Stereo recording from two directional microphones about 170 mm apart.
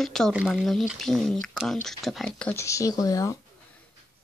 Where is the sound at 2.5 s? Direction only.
20° left (ahead or behind).